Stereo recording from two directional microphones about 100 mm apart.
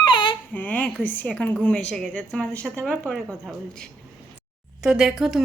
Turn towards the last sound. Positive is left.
turn(degrees=0)  # may be behind; listen again after turning